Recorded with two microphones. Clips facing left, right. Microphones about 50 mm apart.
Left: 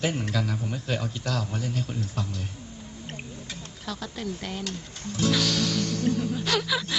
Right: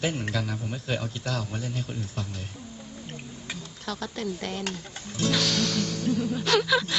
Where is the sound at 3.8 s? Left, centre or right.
Centre.